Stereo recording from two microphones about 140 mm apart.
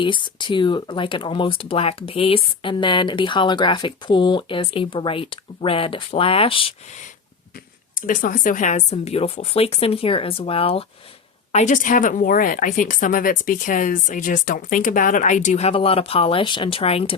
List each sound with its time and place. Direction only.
0.0 s speech: 35° left (ahead or behind)
7.9 s speech: 75° left (ahead or behind); by 10.8 s 40° left (ahead or behind)
11.5 s a woman's voice: 65° left (ahead or behind); by 17.2 s 45° left (ahead or behind)